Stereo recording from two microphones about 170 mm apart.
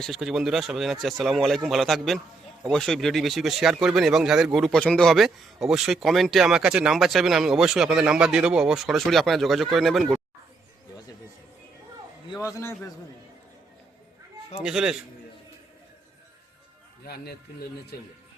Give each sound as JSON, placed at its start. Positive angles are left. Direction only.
{"t": 0.0, "sound": "speech", "side_deg": 0}
{"t": 12.3, "sound": "a man's voice", "side_deg": 20}
{"t": 14.6, "sound": "speech", "side_deg": -5}